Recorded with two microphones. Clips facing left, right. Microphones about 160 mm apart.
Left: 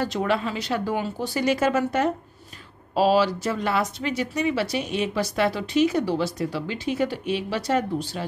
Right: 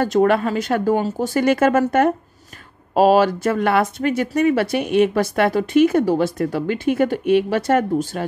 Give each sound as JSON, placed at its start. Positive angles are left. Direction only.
{"t": 0.0, "sound": "speech", "side_deg": -50}